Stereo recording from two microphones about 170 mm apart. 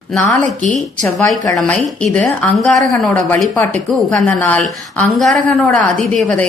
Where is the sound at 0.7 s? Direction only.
Centre (ahead or behind).